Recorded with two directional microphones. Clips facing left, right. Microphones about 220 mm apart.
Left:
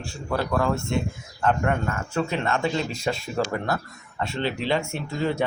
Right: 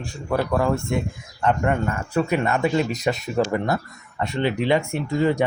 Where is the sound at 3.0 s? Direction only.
20° right (ahead or behind).